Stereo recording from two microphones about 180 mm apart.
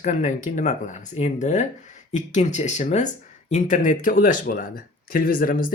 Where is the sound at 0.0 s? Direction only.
45° left (ahead or behind).